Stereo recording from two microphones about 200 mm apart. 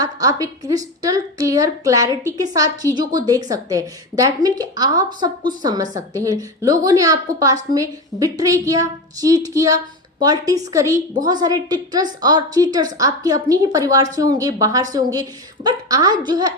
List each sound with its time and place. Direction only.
0.0 s a woman's voice: 15° right (ahead or behind)